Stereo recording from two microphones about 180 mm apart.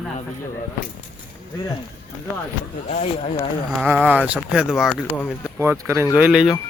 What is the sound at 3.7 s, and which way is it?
Speech, 10° right (ahead or behind).